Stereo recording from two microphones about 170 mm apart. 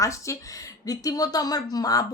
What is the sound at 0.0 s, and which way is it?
A woman's voice, 20° left (ahead or behind).